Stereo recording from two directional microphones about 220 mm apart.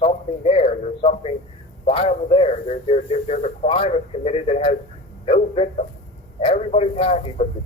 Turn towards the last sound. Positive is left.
turn(degrees=25)  # may be behind; listen again after turning